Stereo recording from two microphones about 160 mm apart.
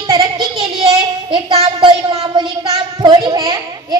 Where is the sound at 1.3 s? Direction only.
30° right (ahead or behind).